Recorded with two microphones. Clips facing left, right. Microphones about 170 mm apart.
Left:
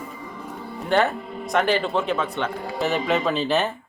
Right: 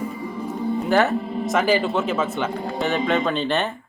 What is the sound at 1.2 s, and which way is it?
Music, 30° right (ahead or behind).